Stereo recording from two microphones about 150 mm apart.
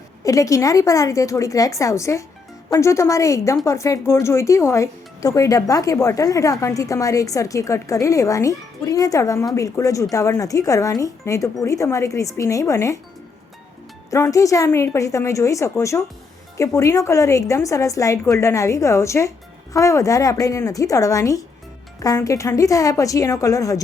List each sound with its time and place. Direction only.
0.3 s speech: 20° left (ahead or behind)
14.1 s speech: 20° left (ahead or behind)